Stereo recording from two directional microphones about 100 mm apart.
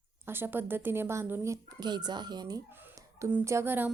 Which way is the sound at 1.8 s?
45° right (ahead or behind).